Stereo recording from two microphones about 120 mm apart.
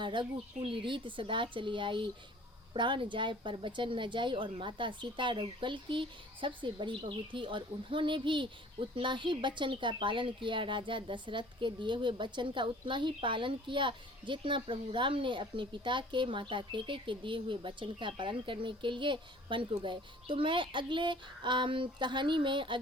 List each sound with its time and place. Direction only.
0.0 s speech: 45° right (ahead or behind)